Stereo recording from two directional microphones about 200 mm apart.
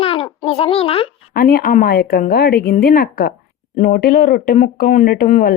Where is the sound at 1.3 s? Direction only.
45° left (ahead or behind).